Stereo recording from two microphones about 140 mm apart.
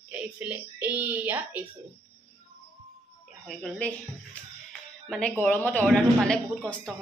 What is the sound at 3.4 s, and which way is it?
Speech, centre (ahead or behind).